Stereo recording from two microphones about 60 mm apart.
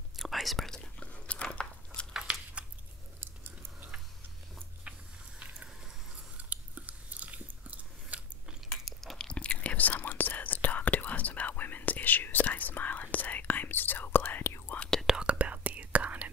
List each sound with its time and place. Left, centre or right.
0.2 s whispering: centre
1.0 s biting: left
2.3 s a sound: centre
3.2 s chewing: right
4.9 s a sound: right
6.3 s chewing: right
8.8 s chewing: centre
9.3 s whispering: centre; by 14.8 s left
15.0 s whispering: centre
15.3 s whispering: right